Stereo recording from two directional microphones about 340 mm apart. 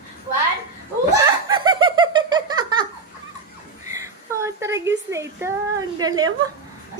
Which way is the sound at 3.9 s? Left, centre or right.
Centre.